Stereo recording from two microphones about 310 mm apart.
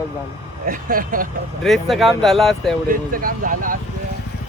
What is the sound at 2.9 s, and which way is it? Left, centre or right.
Speech, right.